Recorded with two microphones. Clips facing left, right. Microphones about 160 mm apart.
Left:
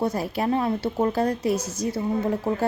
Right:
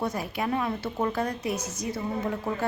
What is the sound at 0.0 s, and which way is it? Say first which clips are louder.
A woman's voice: left 5 dB; 30° left (ahead or behind).